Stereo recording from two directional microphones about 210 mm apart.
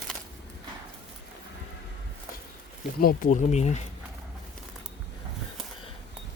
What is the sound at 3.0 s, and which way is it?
Speech, 40° left (ahead or behind).